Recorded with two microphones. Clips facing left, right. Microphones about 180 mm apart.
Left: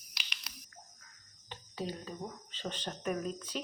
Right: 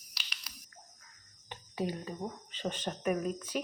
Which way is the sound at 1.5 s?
15° right (ahead or behind).